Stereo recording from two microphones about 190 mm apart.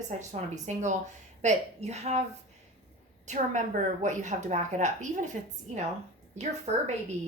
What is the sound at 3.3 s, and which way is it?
Speech, 40° right (ahead or behind).